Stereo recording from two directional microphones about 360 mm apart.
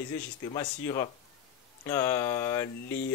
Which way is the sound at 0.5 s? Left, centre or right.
Centre.